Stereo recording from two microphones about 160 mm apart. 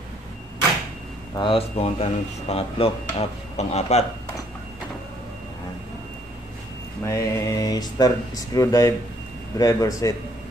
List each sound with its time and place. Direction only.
1.3 s speech: 30° left (ahead or behind)
7.1 s speech: 20° left (ahead or behind)